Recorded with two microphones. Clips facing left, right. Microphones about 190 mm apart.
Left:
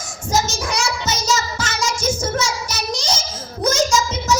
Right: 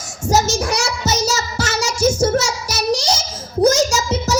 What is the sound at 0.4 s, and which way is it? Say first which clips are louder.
Speech: right 3 dB; 70° right (ahead or behind).